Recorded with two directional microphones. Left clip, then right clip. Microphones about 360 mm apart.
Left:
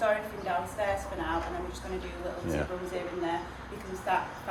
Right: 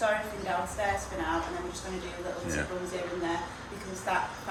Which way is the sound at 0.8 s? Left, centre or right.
Centre.